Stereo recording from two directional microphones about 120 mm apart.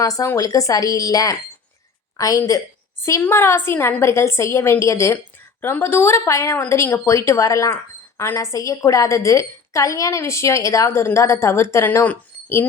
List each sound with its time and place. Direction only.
0.0 s a woman's voice: 30° left (ahead or behind)